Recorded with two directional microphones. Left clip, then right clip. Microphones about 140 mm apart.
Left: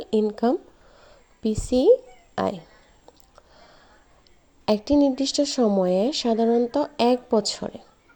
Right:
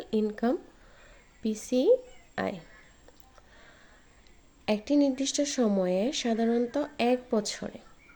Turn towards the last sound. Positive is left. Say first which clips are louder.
# left 7 dB
turn(degrees=30)  # may be behind; listen again after turning